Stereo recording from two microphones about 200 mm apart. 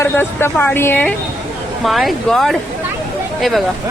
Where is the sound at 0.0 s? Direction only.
10° left (ahead or behind).